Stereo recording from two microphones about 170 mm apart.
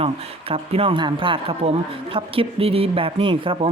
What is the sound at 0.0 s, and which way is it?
Speech, 35° right (ahead or behind).